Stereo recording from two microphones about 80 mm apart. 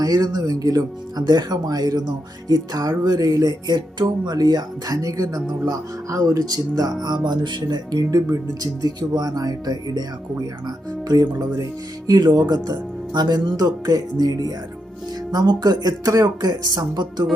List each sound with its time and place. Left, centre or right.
0.0 s speech: right
3.8 s speech: right
13.6 s speech: right